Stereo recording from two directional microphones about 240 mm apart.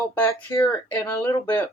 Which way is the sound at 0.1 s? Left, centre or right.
Centre.